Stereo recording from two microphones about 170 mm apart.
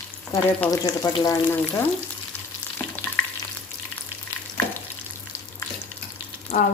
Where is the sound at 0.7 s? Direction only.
20° left (ahead or behind).